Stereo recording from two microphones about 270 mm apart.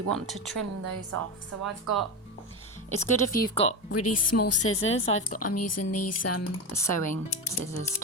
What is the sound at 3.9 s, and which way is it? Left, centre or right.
A woman's voice, left.